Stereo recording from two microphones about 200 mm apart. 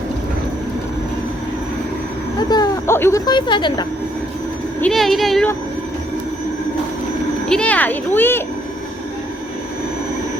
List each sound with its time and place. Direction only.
2.5 s speech: 15° left (ahead or behind)
4.8 s speech: centre (ahead or behind)
7.5 s speech: 5° left (ahead or behind)